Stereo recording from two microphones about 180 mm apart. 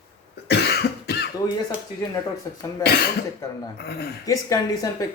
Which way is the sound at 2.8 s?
60° left (ahead or behind).